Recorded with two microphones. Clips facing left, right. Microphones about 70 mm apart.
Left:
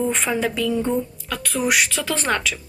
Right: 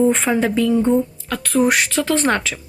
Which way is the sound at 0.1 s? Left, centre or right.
Right.